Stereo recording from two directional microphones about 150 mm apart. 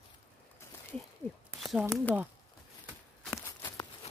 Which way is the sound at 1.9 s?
10° left (ahead or behind).